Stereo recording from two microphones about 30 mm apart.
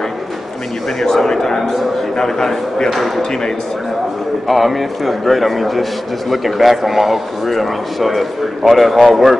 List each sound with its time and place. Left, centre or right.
1.0 s a man's voice: centre
1.6 s a sound: centre
2.1 s a man's voice: centre
4.5 s a man's voice: centre